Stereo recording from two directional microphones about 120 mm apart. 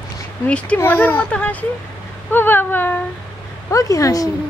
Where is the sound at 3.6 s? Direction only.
25° left (ahead or behind).